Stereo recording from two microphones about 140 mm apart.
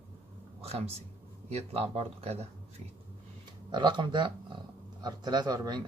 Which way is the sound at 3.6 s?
35° right (ahead or behind).